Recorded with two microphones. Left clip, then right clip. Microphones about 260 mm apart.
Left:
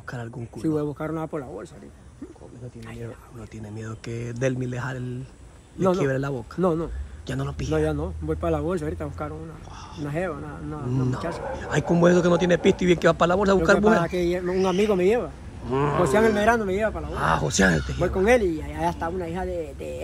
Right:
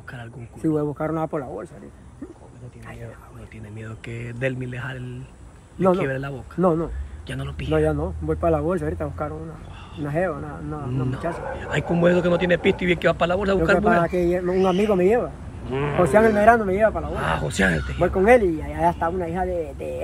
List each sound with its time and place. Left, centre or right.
0.0 s speech: left
0.7 s speech: centre
3.7 s speech: centre
6.6 s speech: centre
7.2 s speech: centre
7.9 s speech: centre
10.9 s speech: centre